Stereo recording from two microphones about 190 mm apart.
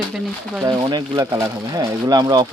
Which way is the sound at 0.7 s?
20° right (ahead or behind).